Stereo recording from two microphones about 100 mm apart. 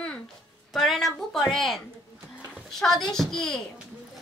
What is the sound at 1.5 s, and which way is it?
A woman's voice, centre (ahead or behind).